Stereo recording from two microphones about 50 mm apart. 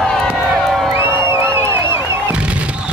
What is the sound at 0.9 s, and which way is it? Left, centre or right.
Music, right.